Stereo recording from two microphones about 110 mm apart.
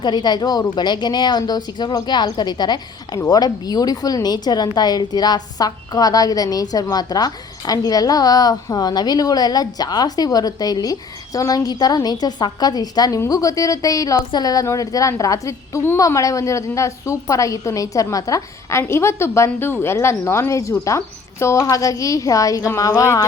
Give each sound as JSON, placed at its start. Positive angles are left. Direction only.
{"t": 0.0, "sound": "a woman's voice", "side_deg": 40}